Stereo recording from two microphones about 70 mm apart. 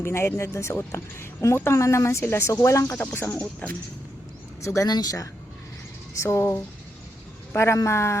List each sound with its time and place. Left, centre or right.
0.0 s speech: left
2.5 s speech: left
3.2 s speech: centre
4.6 s speech: left
4.9 s speech: left
6.2 s speech: left